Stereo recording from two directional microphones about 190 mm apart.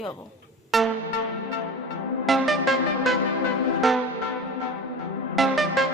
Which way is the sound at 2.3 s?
Centre (ahead or behind).